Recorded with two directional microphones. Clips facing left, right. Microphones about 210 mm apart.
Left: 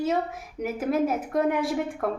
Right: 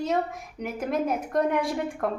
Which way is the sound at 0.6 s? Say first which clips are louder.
Left 3 dB; 5° left (ahead or behind).